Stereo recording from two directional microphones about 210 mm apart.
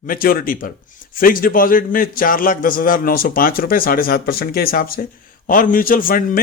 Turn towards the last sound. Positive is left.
turn(degrees=40)  # may be behind; listen again after turning